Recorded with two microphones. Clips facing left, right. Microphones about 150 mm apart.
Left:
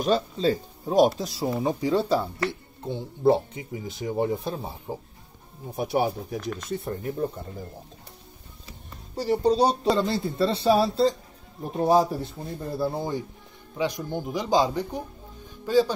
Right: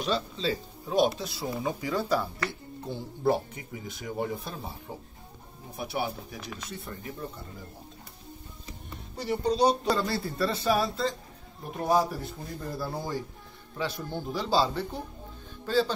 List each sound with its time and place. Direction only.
0.0 s speech: 45° left (ahead or behind); by 4.9 s 25° left (ahead or behind)
5.8 s speech: 40° left (ahead or behind)
6.4 s speech: centre (ahead or behind)
6.7 s speech: 45° left (ahead or behind)
9.1 s speech: 35° left (ahead or behind)
9.8 s a man's voice: 20° left (ahead or behind)